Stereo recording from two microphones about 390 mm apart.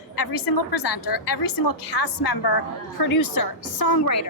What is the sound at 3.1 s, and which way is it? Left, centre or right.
A woman's voice, left.